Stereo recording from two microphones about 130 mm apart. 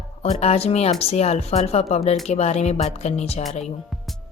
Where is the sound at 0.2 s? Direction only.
55° left (ahead or behind).